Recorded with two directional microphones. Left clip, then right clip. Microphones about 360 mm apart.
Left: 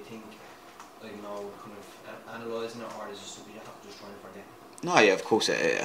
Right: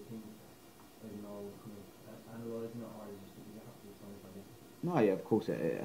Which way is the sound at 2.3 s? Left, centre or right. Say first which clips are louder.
Left 8 dB; centre.